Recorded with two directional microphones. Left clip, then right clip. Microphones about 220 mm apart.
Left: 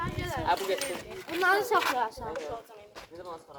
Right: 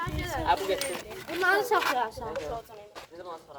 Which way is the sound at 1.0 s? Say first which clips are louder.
Right 1 dB; 45° right (ahead or behind).